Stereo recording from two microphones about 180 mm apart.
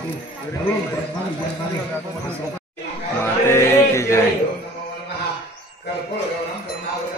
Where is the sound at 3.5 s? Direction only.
15° left (ahead or behind).